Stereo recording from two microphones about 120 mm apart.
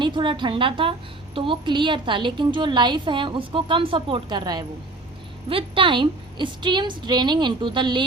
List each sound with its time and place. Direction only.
0.0 s a woman's voice: 40° right (ahead or behind)